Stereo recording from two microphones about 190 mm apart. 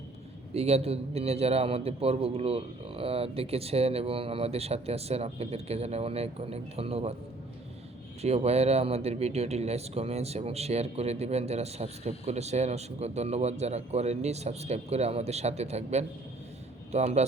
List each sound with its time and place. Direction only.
0.5 s speech: 35° right (ahead or behind)
8.2 s speech: 35° right (ahead or behind)